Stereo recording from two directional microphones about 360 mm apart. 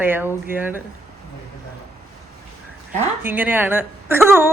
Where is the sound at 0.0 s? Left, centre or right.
Centre.